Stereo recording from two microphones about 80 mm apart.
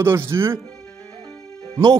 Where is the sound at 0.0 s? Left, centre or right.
Right.